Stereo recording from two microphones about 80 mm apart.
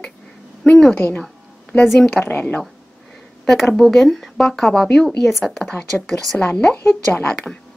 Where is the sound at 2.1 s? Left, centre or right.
Centre.